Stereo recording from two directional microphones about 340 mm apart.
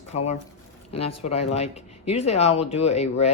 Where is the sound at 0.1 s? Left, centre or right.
Centre.